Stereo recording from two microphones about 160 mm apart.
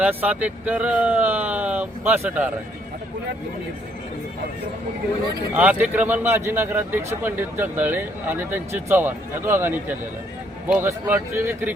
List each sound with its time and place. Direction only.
0.0 s a man's voice: 10° right (ahead or behind)
5.5 s a man's voice: 10° right (ahead or behind)